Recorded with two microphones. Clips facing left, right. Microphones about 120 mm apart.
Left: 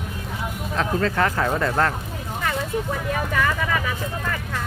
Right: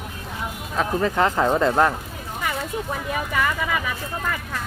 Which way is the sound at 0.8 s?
15° right (ahead or behind).